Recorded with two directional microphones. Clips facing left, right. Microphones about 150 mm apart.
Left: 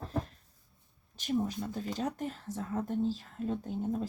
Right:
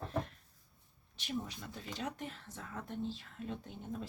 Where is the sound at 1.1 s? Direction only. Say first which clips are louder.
Left 9 dB; 45° left (ahead or behind).